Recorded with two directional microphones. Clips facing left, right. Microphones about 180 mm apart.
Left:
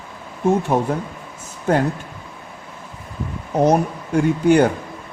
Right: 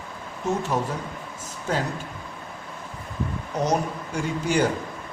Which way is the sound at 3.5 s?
55° left (ahead or behind).